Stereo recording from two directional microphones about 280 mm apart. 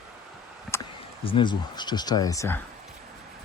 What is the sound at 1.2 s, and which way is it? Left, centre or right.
Speech, centre.